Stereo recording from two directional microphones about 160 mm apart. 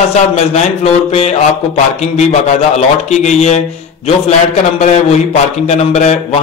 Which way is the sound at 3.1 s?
45° left (ahead or behind).